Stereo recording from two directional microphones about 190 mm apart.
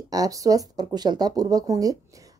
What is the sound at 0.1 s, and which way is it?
A woman's voice, 20° right (ahead or behind).